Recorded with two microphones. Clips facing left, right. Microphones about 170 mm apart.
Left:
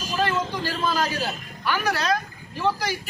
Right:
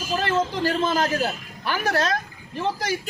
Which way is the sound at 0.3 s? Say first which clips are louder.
Right 5 dB; 45° right (ahead or behind).